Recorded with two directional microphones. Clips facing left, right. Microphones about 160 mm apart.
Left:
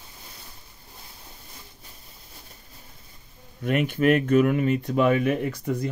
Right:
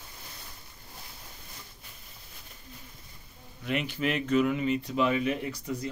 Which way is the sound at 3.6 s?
50° left (ahead or behind).